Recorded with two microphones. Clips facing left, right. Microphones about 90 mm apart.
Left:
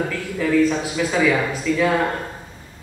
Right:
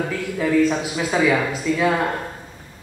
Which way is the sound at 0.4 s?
15° right (ahead or behind).